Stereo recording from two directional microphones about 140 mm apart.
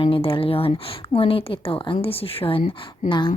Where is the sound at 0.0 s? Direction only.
40° left (ahead or behind).